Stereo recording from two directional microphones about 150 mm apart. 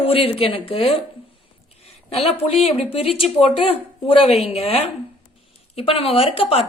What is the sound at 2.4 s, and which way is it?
A woman's voice, 40° left (ahead or behind).